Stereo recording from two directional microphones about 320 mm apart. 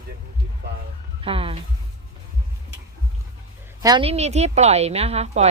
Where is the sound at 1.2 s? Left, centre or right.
Centre.